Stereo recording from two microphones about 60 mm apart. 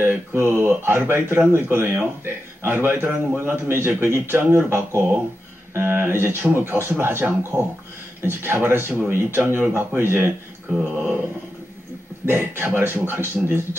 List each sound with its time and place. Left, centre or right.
0.0 s a man's voice: right
10.7 s a sound: centre
12.3 s a man's voice: right